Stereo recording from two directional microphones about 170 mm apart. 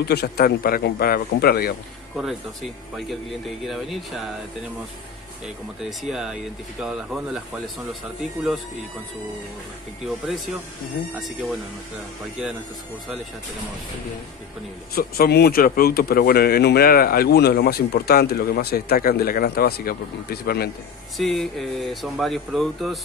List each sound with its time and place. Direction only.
0.1 s a man's voice: 75° left (ahead or behind)
2.1 s speech: centre (ahead or behind)
5.9 s speech: 5° right (ahead or behind)
10.0 s speech: centre (ahead or behind)
15.0 s a man's voice: 65° left (ahead or behind)
21.2 s speech: centre (ahead or behind)